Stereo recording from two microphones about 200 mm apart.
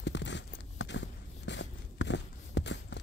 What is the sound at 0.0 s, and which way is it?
Walk, 65° left (ahead or behind).